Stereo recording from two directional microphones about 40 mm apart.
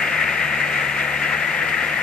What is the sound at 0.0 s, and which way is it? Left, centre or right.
Vehicle, left.